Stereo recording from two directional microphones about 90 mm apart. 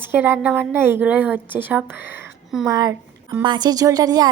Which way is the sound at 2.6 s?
50° right (ahead or behind).